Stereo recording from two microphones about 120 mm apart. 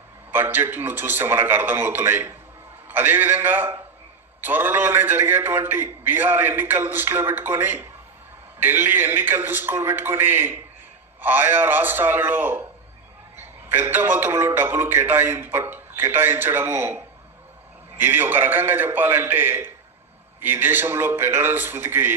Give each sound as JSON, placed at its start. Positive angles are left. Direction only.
{"t": 0.3, "sound": "a man's voice", "side_deg": -15}